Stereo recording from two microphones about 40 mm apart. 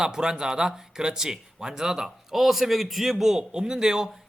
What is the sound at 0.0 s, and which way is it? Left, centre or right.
Speech, centre.